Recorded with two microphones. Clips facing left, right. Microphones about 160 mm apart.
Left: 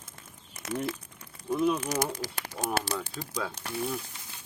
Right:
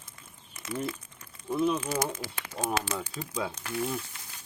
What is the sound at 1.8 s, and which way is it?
Speech, 40° left (ahead or behind).